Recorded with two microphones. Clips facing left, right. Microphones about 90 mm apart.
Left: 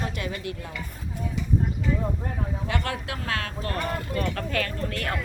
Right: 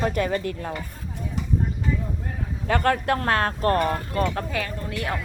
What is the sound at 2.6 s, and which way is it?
Speech, 45° right (ahead or behind).